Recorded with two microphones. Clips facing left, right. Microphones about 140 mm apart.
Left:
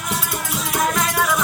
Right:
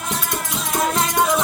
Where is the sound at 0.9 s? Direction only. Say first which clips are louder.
Right 2 dB; 25° right (ahead or behind).